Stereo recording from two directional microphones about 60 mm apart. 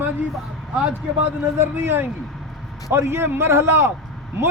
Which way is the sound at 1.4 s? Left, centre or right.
Right.